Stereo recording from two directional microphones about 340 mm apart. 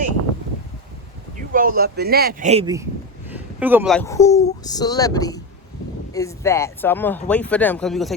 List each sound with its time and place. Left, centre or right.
1.4 s speech: right; by 8.1 s centre